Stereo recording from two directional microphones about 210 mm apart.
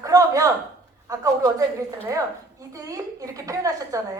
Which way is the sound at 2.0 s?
15° right (ahead or behind).